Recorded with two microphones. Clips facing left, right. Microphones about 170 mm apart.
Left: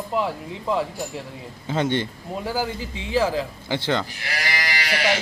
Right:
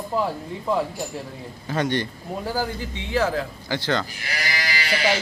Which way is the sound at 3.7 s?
20° left (ahead or behind).